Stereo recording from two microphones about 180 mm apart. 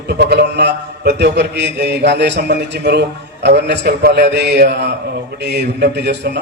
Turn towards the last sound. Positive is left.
turn(degrees=-70)  # may be behind; listen again after turning